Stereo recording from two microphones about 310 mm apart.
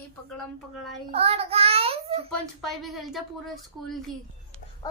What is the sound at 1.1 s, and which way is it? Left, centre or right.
Child singing, centre.